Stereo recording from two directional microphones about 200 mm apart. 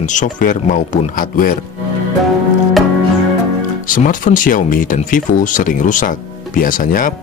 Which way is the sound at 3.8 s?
40° left (ahead or behind).